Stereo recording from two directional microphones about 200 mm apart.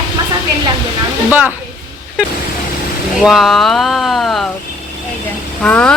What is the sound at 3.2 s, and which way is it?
Speech, centre (ahead or behind).